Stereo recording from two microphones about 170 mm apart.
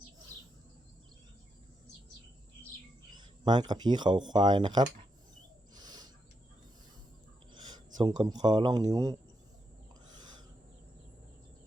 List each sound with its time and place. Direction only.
3.2 s speech: 25° right (ahead or behind)
5.7 s owl: 25° right (ahead or behind)
7.5 s a sound: 25° right (ahead or behind)
7.9 s speech: 25° right (ahead or behind)